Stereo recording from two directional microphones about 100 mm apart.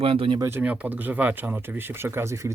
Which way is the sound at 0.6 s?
15° right (ahead or behind).